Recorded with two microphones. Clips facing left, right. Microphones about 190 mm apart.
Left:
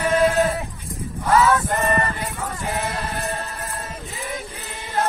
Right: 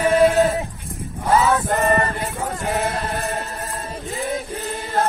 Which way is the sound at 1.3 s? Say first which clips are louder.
Even; 30° right (ahead or behind).